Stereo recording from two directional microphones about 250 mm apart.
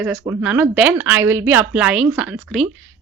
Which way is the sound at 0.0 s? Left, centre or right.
Centre.